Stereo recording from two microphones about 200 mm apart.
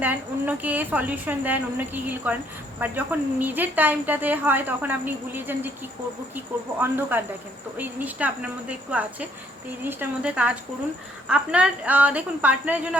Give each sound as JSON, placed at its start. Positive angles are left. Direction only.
{"t": 0.0, "sound": "a woman's voice", "side_deg": -10}